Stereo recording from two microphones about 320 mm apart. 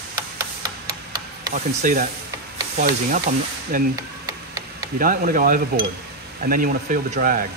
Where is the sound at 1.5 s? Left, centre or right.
Right.